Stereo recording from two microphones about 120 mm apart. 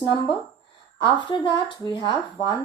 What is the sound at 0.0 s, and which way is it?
Speech, 45° left (ahead or behind).